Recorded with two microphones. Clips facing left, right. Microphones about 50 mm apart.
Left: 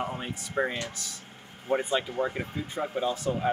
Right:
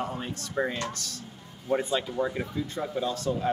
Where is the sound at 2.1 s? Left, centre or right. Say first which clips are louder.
Right 1 dB; left.